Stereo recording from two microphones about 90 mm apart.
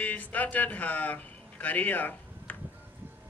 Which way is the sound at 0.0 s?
20° left (ahead or behind).